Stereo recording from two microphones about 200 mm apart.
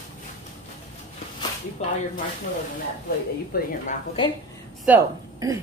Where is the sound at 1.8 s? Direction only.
35° left (ahead or behind).